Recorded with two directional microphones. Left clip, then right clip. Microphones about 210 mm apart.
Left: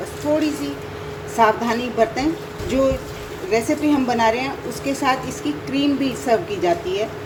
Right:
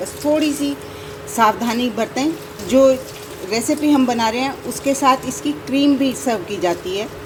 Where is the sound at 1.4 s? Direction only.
30° right (ahead or behind).